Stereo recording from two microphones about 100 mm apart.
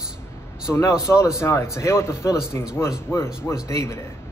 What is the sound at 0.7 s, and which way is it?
A man's voice, 30° left (ahead or behind).